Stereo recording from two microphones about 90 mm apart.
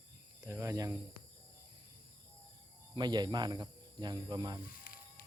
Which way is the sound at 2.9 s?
55° right (ahead or behind).